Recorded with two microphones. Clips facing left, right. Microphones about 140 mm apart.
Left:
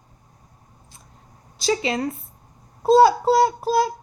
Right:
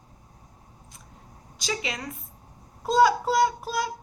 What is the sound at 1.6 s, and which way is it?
Child singing, 30° left (ahead or behind).